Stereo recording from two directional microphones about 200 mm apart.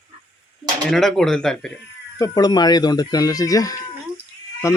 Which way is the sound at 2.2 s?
15° left (ahead or behind).